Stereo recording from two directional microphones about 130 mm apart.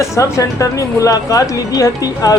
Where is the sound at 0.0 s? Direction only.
25° left (ahead or behind).